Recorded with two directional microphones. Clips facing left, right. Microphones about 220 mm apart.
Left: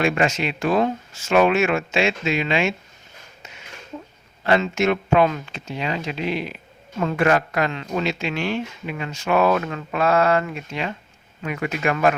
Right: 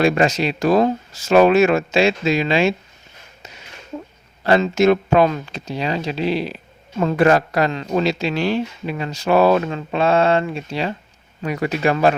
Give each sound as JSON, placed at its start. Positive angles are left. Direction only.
{"t": 0.0, "sound": "speech", "side_deg": -35}
{"t": 4.4, "sound": "speech", "side_deg": -35}